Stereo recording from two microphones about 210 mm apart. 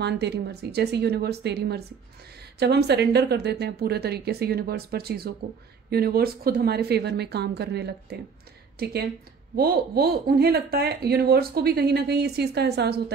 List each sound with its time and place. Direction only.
0.0 s speech: 55° right (ahead or behind)